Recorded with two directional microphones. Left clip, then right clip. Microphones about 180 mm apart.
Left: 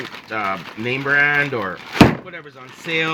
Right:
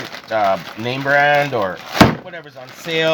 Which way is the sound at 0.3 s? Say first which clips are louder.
Right 7 dB; 50° right (ahead or behind).